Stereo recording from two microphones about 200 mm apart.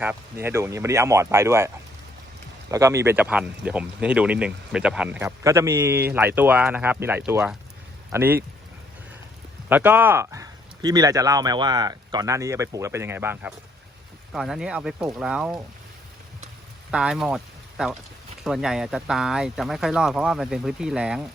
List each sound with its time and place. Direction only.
0.0 s speech: 10° right (ahead or behind)
9.6 s speech: 10° right (ahead or behind)
16.9 s speech: 5° right (ahead or behind)